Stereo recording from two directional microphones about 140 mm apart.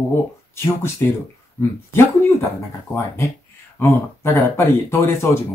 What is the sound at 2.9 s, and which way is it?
Speech, 20° left (ahead or behind).